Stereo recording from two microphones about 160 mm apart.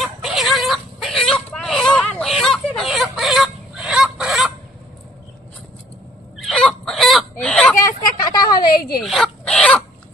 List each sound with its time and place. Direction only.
0.0 s fowl: centre (ahead or behind)
6.3 s fowl: centre (ahead or behind)
7.8 s vehicle: 25° left (ahead or behind)
8.9 s dog: centre (ahead or behind)